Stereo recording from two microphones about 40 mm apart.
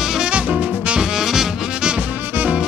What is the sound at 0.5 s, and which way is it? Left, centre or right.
Music, right.